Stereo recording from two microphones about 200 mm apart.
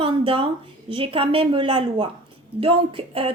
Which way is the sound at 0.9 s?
25° right (ahead or behind).